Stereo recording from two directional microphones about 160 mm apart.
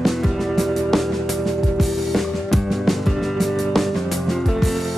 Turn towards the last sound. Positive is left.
turn(degrees=0)  # may be behind; listen again after turning